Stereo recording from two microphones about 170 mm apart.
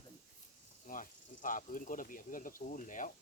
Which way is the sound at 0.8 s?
50° left (ahead or behind).